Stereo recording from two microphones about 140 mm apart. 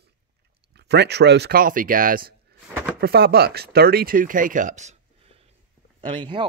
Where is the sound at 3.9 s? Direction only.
90° right; by 5.0 s 55° right (ahead or behind).